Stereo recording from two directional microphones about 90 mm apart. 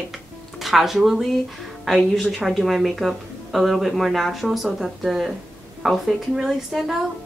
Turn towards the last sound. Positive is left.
turn(degrees=-5)  # may be behind; listen again after turning